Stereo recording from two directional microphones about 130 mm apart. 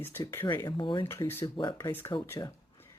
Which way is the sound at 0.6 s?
35° left (ahead or behind).